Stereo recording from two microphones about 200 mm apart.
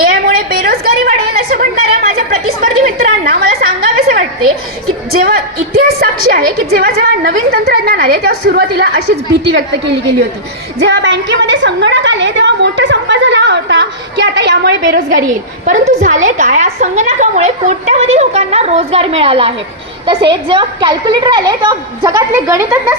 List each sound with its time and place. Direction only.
0.0 s a sound: 45° right (ahead or behind)
5.1 s a woman's voice: 50° right (ahead or behind)
14.8 s a woman's voice: 45° right (ahead or behind); by 23.0 s 15° right (ahead or behind)